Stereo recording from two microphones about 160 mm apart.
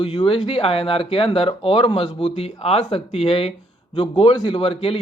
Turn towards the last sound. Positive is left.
turn(degrees=35)  # may be behind; listen again after turning